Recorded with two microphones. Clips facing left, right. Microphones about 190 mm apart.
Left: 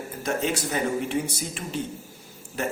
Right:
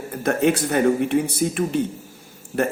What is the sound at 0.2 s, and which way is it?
A man's voice, 55° right (ahead or behind).